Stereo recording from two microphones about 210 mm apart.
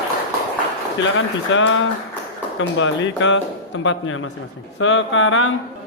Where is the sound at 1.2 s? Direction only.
65° left (ahead or behind).